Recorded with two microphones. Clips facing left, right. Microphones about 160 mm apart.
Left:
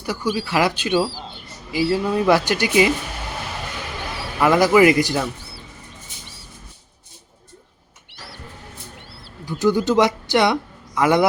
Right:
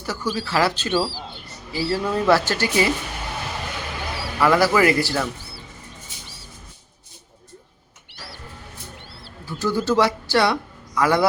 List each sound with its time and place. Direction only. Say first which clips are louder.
0.0 s speech: left 3 dB; 15° left (ahead or behind)
4.4 s speech: left 3 dB; 20° left (ahead or behind)
9.5 s a man's voice: left 4 dB; 15° left (ahead or behind)